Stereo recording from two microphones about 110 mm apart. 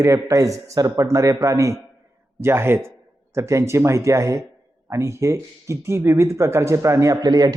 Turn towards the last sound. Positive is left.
turn(degrees=-35)  # may be behind; listen again after turning